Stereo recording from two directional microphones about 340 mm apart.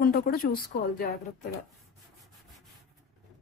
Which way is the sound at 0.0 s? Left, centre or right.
Left.